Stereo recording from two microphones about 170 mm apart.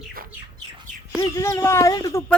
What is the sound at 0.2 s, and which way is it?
Bird, 55° right (ahead or behind).